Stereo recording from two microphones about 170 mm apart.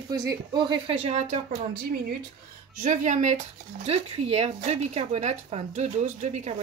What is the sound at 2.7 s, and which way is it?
Speech, 50° right (ahead or behind).